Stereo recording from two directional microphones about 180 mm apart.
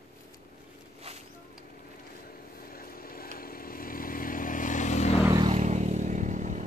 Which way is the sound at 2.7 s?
55° left (ahead or behind).